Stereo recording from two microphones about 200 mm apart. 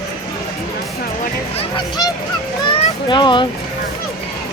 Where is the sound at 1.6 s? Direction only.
25° left (ahead or behind).